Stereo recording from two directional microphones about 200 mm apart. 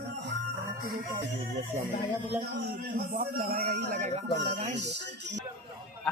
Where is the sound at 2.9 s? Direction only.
45° right (ahead or behind).